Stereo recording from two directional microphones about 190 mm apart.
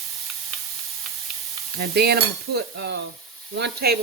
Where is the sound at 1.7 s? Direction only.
55° right (ahead or behind).